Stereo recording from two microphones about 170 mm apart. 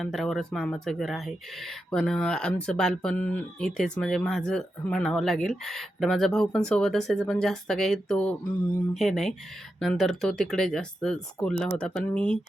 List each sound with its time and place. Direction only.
0.0 s speech: 5° left (ahead or behind)